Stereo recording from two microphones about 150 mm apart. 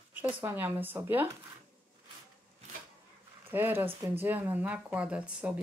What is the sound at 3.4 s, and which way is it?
Speech, 15° right (ahead or behind).